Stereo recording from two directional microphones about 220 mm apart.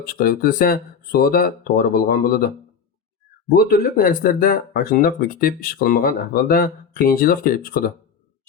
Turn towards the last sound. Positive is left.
turn(degrees=40)  # may be behind; listen again after turning